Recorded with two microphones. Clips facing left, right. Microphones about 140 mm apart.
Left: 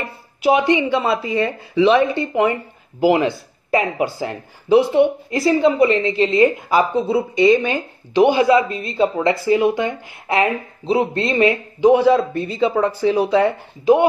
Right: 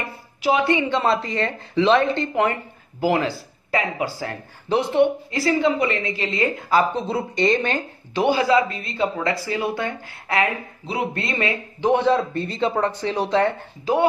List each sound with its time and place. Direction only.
0.4 s a woman's voice: 20° left (ahead or behind)
8.3 s speech: 20° left (ahead or behind)